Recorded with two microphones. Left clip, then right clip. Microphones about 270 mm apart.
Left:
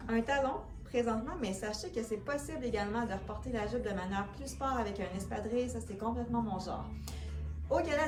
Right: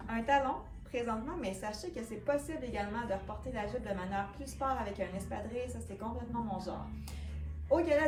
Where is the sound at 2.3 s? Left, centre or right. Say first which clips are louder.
Right 1 dB; centre.